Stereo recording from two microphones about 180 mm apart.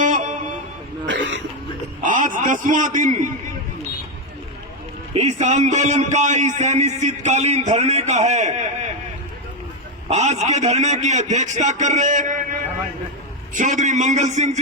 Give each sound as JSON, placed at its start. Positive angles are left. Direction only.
{"t": 0.0, "sound": "music", "side_deg": -45}
{"t": 1.0, "sound": "throat clearing", "side_deg": -90}
{"t": 2.0, "sound": "a sound", "side_deg": -45}
{"t": 5.1, "sound": "a man's voice", "side_deg": -35}
{"t": 10.1, "sound": "a man's voice", "side_deg": -40}